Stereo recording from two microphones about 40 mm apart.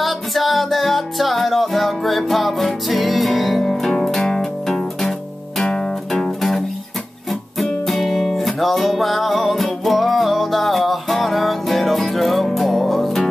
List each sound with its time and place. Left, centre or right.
0.0 s music: centre
5.7 s music: centre
7.5 s music: centre